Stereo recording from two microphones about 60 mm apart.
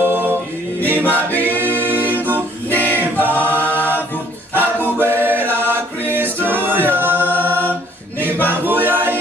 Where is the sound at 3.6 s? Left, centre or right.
Left.